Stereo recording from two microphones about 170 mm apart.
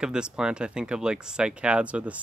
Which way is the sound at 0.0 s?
5° right (ahead or behind).